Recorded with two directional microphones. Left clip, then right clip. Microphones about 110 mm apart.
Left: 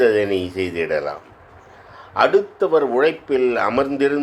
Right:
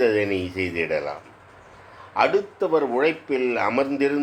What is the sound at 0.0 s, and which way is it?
A man's voice, 35° left (ahead or behind).